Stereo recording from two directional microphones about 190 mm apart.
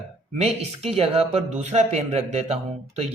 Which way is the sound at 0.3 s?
35° right (ahead or behind).